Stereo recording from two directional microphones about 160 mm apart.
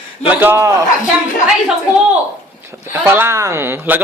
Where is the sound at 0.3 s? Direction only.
15° right (ahead or behind).